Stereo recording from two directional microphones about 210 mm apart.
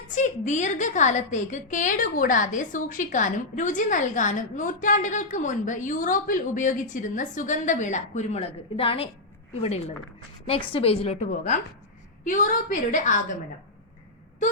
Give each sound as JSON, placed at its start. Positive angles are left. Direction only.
{"t": 0.1, "sound": "a woman's voice", "side_deg": 35}